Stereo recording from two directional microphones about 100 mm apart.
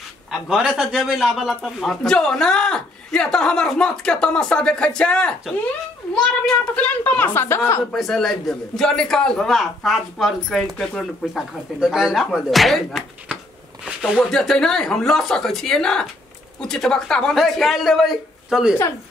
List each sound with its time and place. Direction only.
0.3 s a man's voice: 5° right (ahead or behind)
6.4 s speech: 15° left (ahead or behind)
7.9 s a man's voice: centre (ahead or behind)